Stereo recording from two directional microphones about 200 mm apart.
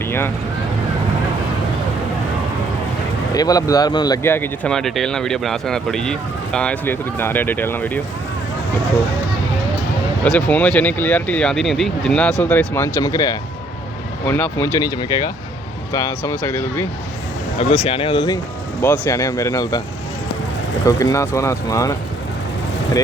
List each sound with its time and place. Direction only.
3.3 s speech: 20° left (ahead or behind)
10.3 s speech: 5° left (ahead or behind)
17.6 s speech: 30° left (ahead or behind)
18.8 s speech: 10° left (ahead or behind)
20.8 s speech: 15° left (ahead or behind)